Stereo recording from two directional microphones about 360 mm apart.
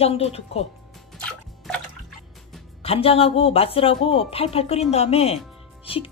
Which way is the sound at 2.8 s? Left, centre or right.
Centre.